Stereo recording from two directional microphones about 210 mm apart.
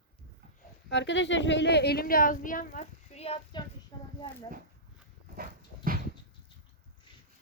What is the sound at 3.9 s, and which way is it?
Speech, 20° left (ahead or behind).